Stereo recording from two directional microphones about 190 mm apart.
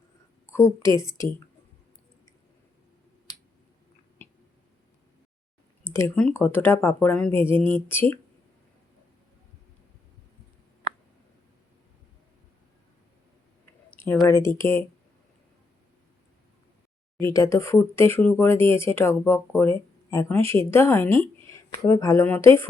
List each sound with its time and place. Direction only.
0.4 s speech: 15° left (ahead or behind)
4.2 s a sound: 10° left (ahead or behind)
5.9 s speech: 10° left (ahead or behind)
14.3 s speech: 15° left (ahead or behind)
17.2 s speech: 15° left (ahead or behind)